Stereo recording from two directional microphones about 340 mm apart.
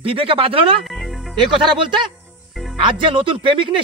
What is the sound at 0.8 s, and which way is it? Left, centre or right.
Music, centre.